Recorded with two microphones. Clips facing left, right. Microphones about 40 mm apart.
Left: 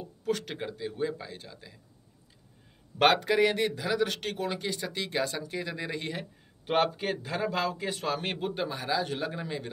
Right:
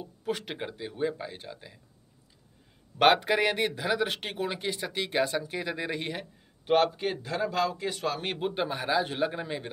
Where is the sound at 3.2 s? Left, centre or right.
Right.